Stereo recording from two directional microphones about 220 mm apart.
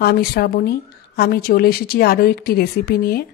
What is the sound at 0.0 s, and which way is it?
Speech, 45° left (ahead or behind).